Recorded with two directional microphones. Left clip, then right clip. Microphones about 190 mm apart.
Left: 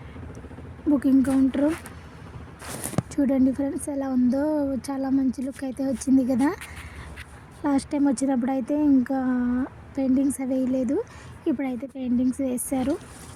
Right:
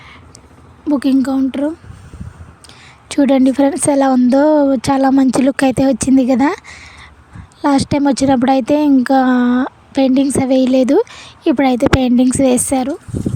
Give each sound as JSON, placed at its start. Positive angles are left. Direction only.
{"t": 0.9, "sound": "a woman's voice", "side_deg": -45}
{"t": 3.1, "sound": "a woman's voice", "side_deg": -45}
{"t": 11.5, "sound": "speech", "side_deg": -60}